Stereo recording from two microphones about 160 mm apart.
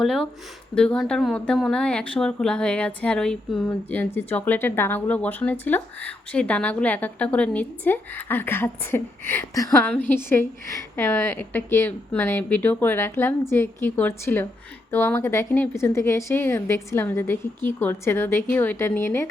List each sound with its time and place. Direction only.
0.0 s speech: centre (ahead or behind)